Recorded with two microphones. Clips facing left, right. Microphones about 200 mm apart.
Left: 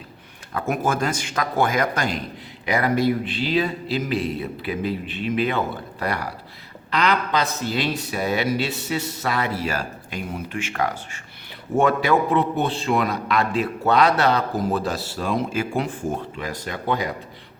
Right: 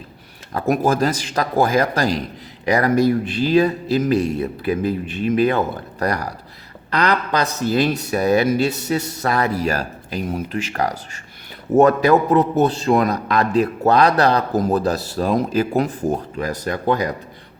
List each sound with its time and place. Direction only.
0.5 s a man's voice: 35° right (ahead or behind)